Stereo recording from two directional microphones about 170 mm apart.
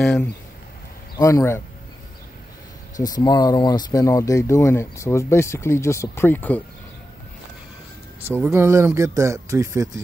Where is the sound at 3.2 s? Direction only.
25° left (ahead or behind).